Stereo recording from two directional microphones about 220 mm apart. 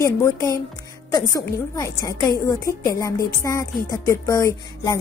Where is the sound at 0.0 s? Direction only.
15° left (ahead or behind).